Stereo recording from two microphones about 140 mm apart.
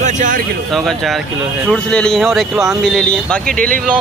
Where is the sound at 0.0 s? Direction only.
65° right (ahead or behind).